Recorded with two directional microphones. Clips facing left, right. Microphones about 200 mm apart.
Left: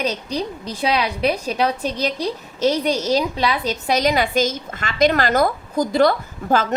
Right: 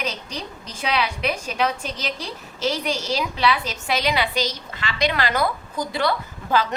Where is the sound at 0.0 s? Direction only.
35° left (ahead or behind).